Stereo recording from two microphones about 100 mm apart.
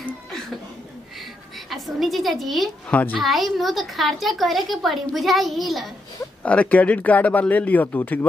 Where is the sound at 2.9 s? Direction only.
15° left (ahead or behind).